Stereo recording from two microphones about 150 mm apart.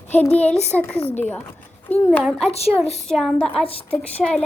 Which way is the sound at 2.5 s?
45° left (ahead or behind).